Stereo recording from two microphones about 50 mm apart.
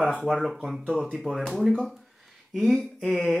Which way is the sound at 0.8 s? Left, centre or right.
Centre.